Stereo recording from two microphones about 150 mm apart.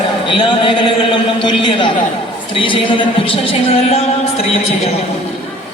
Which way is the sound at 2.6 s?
35° left (ahead or behind).